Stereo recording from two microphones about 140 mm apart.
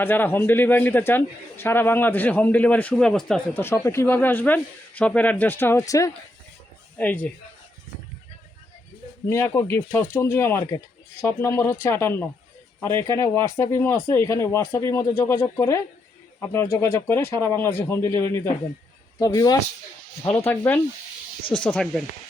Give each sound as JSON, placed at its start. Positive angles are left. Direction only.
{"t": 0.0, "sound": "a man's voice", "side_deg": 15}
{"t": 3.6, "sound": "a man's voice", "side_deg": 20}
{"t": 7.0, "sound": "a man's voice", "side_deg": 10}
{"t": 9.3, "sound": "a man's voice", "side_deg": 20}
{"t": 20.3, "sound": "a man's voice", "side_deg": 15}